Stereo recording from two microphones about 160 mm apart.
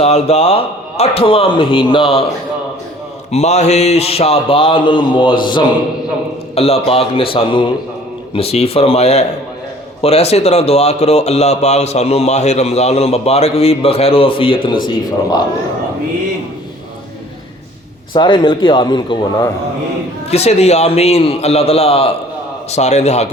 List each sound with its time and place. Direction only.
0.0 s speech: 40° left (ahead or behind)
3.3 s speech: 45° left (ahead or behind); by 15.4 s 30° left (ahead or behind)
18.1 s speech: 30° left (ahead or behind)
20.3 s a man's voice: 40° left (ahead or behind)